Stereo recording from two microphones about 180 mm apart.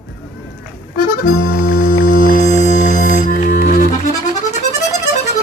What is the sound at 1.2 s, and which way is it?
Music, 50° left (ahead or behind).